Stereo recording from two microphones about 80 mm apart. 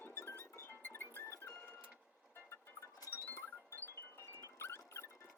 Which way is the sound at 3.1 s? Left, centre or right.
Left.